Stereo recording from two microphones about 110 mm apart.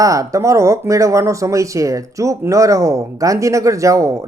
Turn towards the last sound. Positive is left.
turn(degrees=-30)  # may be behind; listen again after turning